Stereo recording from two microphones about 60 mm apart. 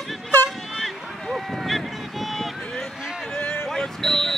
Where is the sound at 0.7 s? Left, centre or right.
Centre.